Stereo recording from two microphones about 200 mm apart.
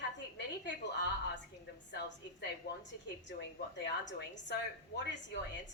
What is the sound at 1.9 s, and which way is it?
Speech, 60° left (ahead or behind).